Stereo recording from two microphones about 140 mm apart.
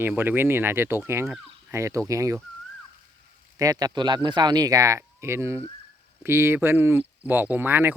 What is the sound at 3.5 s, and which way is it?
Speech, 25° right (ahead or behind).